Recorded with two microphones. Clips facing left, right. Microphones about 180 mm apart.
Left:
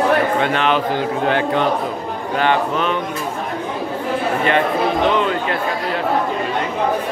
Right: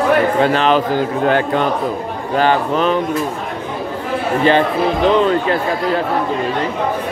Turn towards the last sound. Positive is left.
turn(degrees=-35)  # may be behind; listen again after turning